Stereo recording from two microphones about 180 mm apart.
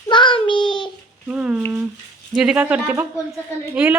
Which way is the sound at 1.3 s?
5° right (ahead or behind).